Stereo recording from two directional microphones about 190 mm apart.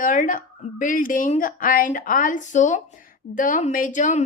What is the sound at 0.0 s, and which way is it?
Speech, 45° left (ahead or behind).